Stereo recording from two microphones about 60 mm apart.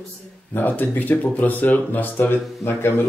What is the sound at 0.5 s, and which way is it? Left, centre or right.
Speech, left.